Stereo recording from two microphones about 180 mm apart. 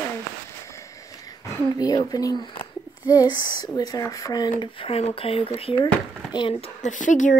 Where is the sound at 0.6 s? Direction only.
15° left (ahead or behind).